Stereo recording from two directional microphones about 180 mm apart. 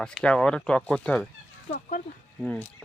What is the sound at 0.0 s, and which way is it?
Speech, 5° left (ahead or behind).